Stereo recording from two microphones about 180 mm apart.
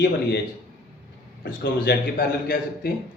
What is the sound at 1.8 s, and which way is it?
Speech, 65° left (ahead or behind).